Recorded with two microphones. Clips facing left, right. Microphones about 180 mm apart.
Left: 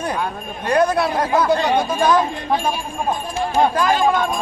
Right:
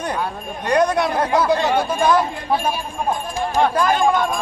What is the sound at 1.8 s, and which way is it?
Speech, 5° right (ahead or behind).